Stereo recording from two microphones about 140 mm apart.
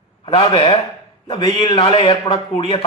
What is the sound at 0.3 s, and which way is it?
A man's voice, 40° left (ahead or behind).